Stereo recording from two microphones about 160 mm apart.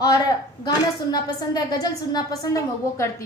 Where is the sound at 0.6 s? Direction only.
25° left (ahead or behind).